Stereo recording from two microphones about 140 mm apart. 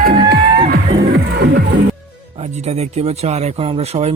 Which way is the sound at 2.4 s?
50° right (ahead or behind).